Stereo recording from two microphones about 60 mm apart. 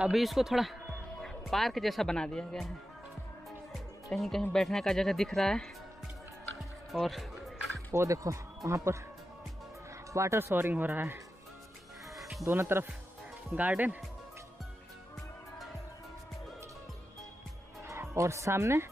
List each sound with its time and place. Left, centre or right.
0.1 s speech: centre
2.1 s speech: centre
4.1 s speech: centre
6.9 s music: centre
7.9 s speech: right
10.1 s speech: right
10.4 s speech: right
12.2 s music: centre
12.4 s speech: right
13.6 s speech: right
17.8 s speech: right